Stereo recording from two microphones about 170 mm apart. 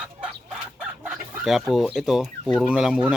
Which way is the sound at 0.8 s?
5° right (ahead or behind).